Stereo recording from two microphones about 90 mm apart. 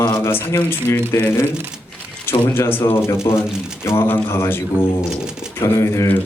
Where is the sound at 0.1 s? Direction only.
25° left (ahead or behind).